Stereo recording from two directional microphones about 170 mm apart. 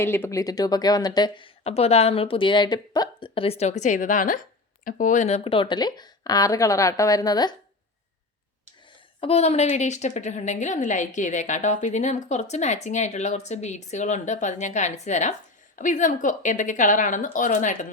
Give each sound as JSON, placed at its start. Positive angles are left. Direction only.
{"t": 0.0, "sound": "speech", "side_deg": 15}
{"t": 1.6, "sound": "a woman's voice", "side_deg": 35}
{"t": 9.2, "sound": "a woman's voice", "side_deg": 35}